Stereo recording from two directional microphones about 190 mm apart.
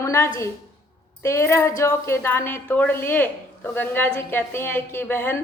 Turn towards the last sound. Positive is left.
turn(degrees=10)  # may be behind; listen again after turning